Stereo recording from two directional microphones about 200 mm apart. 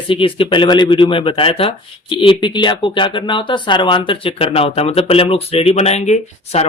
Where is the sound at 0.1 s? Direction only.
25° left (ahead or behind).